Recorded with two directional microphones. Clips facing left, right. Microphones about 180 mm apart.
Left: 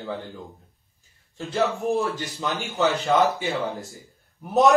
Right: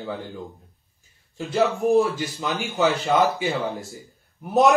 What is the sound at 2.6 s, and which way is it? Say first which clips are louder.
Speech: right 2 dB; centre (ahead or behind).